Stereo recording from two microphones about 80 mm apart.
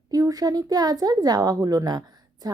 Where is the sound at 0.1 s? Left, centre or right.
Right.